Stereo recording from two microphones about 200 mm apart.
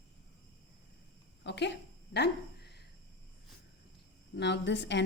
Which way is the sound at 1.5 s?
60° left (ahead or behind).